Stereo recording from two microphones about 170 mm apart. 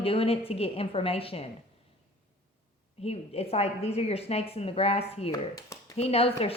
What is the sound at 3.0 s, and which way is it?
A woman's voice, 35° left (ahead or behind).